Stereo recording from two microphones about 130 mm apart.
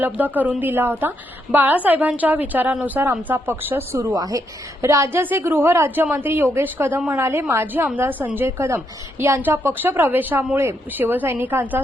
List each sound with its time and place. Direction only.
0.0 s a woman's voice: 15° right (ahead or behind)